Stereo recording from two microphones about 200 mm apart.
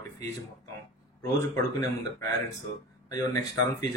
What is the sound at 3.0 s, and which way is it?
Speech, 15° left (ahead or behind).